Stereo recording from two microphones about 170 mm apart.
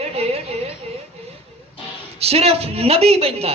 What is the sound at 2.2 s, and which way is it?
A man's voice, 35° right (ahead or behind).